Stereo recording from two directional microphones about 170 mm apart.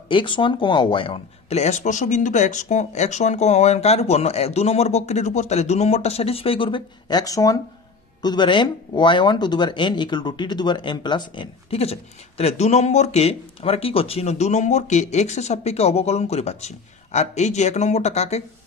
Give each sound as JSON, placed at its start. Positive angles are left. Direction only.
{"t": 0.1, "sound": "speech", "side_deg": 30}